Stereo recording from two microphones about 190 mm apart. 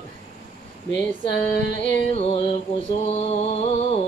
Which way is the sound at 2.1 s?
30° left (ahead or behind).